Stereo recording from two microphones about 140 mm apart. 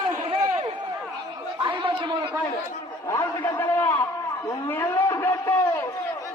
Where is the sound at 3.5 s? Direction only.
15° left (ahead or behind).